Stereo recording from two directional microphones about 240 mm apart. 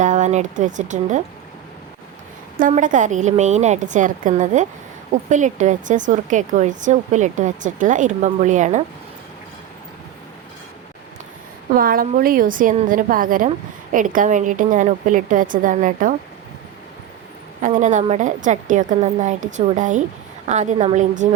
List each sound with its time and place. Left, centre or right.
0.0 s speech: right
2.6 s speech: right
11.7 s speech: right
17.6 s a woman's voice: right